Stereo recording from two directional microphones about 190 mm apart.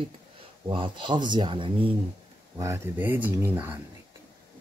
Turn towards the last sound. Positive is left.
turn(degrees=-10)  # may be behind; listen again after turning